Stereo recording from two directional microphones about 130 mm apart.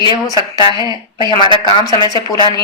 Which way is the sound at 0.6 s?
40° left (ahead or behind).